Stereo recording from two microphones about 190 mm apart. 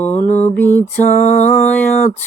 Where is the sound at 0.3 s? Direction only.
35° left (ahead or behind).